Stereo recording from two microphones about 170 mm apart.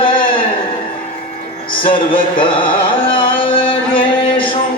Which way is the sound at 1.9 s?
30° left (ahead or behind).